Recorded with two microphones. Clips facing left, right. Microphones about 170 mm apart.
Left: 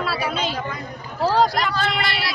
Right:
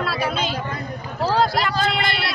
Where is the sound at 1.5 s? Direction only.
10° right (ahead or behind).